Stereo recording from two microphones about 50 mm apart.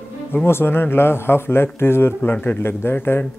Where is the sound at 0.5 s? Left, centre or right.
Left.